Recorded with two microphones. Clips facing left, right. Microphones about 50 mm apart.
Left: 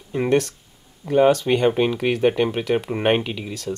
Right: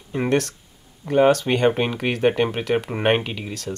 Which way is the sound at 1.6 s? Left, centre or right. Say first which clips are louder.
Even; centre.